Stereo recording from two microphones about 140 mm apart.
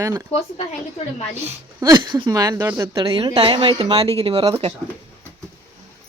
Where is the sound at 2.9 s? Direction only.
40° right (ahead or behind).